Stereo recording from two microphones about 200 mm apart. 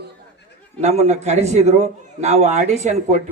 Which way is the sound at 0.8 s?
35° right (ahead or behind).